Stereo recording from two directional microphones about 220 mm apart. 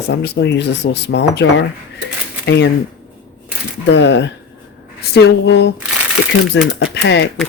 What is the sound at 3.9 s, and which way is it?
Speech, 50° left (ahead or behind).